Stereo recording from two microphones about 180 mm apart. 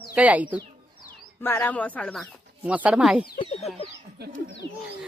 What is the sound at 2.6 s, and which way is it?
Speech, 5° right (ahead or behind).